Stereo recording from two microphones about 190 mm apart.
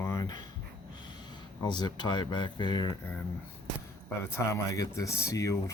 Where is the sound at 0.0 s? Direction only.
15° left (ahead or behind).